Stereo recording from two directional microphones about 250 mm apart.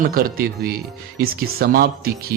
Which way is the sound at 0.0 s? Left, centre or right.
Right.